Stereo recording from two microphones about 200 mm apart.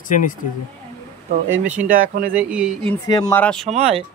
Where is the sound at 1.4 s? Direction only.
10° right (ahead or behind).